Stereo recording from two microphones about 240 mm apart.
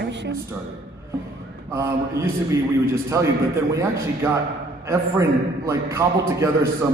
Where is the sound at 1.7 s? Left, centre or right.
Centre.